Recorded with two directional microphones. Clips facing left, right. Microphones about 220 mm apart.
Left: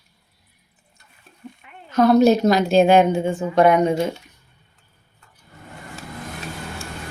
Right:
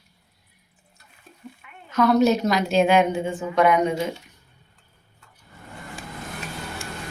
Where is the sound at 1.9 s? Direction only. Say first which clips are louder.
Left 4 dB; 30° left (ahead or behind).